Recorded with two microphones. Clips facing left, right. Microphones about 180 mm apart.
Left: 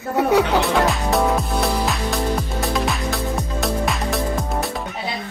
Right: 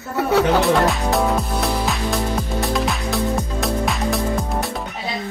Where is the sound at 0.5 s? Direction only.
Centre (ahead or behind).